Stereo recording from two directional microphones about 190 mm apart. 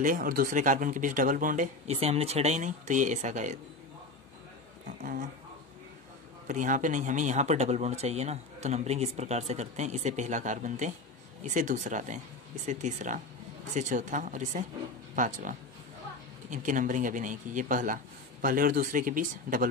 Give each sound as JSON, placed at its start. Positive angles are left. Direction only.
{"t": 0.0, "sound": "speech", "side_deg": -45}
{"t": 5.0, "sound": "speech", "side_deg": -45}
{"t": 6.4, "sound": "speech", "side_deg": -40}